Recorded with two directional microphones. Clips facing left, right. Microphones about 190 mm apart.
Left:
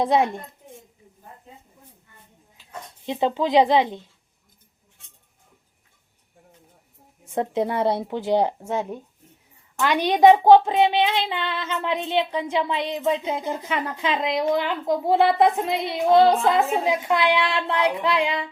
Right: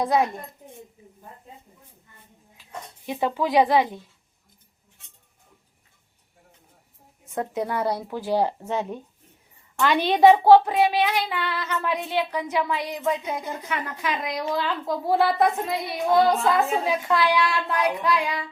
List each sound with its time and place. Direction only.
0.0 s speech: 25° left (ahead or behind)
3.1 s speech: 20° left (ahead or behind)
7.3 s speech: 25° left (ahead or behind)